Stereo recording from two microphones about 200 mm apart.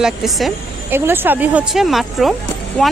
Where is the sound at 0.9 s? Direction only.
10° right (ahead or behind).